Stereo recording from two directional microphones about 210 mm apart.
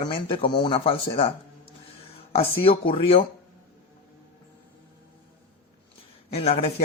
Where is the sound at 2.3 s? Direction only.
25° left (ahead or behind).